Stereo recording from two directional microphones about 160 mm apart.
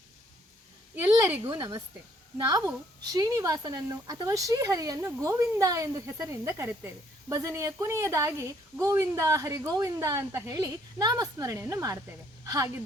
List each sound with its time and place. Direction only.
1.1 s a woman's voice: 20° right (ahead or behind)